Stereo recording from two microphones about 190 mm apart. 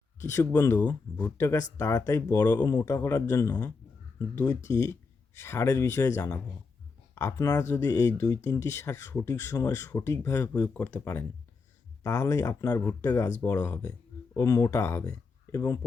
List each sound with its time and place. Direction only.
0.3 s speech: 15° left (ahead or behind)
4.7 s speech: 15° left (ahead or behind)